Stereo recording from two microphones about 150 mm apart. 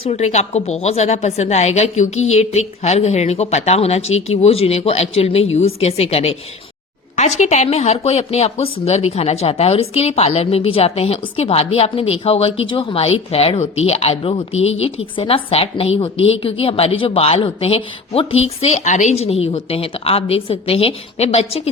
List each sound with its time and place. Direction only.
0.0 s a woman's voice: 45° left (ahead or behind)